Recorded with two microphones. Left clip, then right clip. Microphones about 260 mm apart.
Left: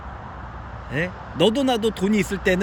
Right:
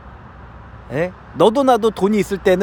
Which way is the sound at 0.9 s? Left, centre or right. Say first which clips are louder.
Right 5 dB; centre.